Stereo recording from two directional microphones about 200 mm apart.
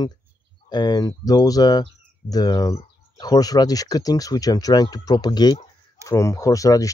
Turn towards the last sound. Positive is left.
turn(degrees=15)  # may be behind; listen again after turning